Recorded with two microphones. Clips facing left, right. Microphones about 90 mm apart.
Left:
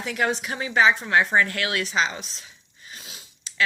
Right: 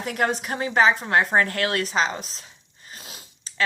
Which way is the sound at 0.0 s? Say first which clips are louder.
Right 1 dB; 45° right (ahead or behind).